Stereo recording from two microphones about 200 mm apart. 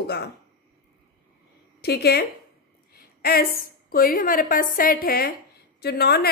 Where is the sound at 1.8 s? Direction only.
55° left (ahead or behind).